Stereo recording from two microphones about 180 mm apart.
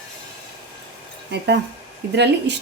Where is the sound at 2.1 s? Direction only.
70° right (ahead or behind).